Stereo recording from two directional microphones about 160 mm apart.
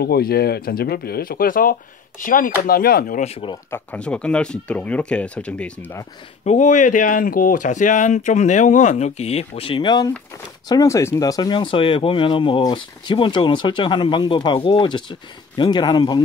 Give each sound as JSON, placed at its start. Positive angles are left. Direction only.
{"t": 0.0, "sound": "speech", "side_deg": 75}
{"t": 3.3, "sound": "speech", "side_deg": 35}
{"t": 3.7, "sound": "speech", "side_deg": 10}
{"t": 6.4, "sound": "speech", "side_deg": 50}